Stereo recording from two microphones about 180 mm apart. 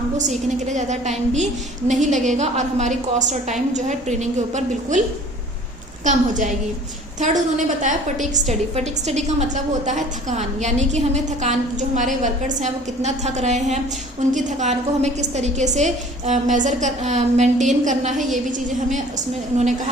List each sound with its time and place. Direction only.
0.4 s a woman's voice: 40° right (ahead or behind)
6.1 s a woman's voice: 45° right (ahead or behind)
7.8 s a woman's voice: 40° right (ahead or behind)